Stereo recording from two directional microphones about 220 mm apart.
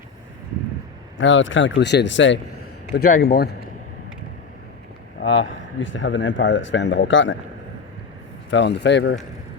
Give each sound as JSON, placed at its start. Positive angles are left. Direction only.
{"t": 1.2, "sound": "speech", "side_deg": 60}
{"t": 2.9, "sound": "speech", "side_deg": 45}
{"t": 5.2, "sound": "speech", "side_deg": 55}
{"t": 8.4, "sound": "speech", "side_deg": 55}